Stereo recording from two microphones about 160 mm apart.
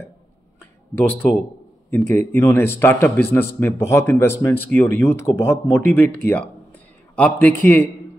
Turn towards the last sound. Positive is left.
turn(degrees=10)  # may be behind; listen again after turning